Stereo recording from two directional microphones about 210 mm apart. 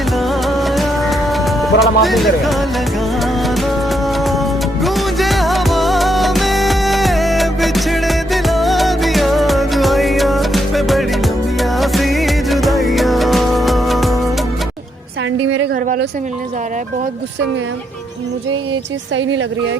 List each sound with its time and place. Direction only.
0.2 s music: centre (ahead or behind)
19.1 s a woman's voice: 65° right (ahead or behind)